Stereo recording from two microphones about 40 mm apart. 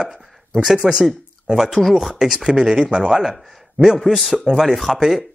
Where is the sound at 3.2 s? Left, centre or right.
Centre.